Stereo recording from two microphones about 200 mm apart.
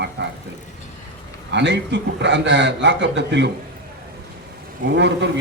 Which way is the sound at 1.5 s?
60° right (ahead or behind).